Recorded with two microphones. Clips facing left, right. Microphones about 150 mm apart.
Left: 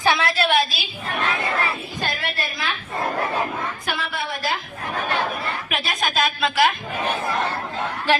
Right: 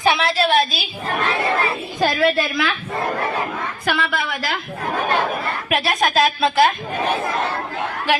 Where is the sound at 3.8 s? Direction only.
75° right (ahead or behind); by 4.6 s 90° right.